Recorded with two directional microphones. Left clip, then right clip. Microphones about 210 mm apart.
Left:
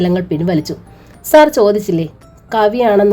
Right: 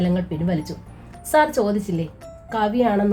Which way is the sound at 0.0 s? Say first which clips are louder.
Left 9 dB; 45° left (ahead or behind).